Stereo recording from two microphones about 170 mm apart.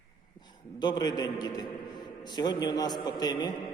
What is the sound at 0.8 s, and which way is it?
A man's voice, 25° left (ahead or behind).